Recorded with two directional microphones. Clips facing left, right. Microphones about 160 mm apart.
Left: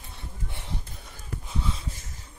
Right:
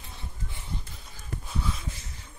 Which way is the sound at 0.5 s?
70° left (ahead or behind).